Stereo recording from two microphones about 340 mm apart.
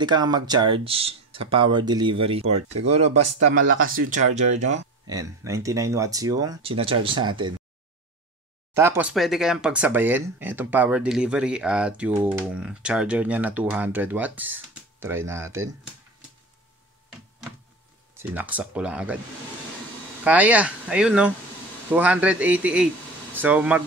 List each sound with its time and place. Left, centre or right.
0.0 s speech: centre
4.4 s speech: right
8.7 s speech: centre
18.1 s speech: centre
20.2 s speech: centre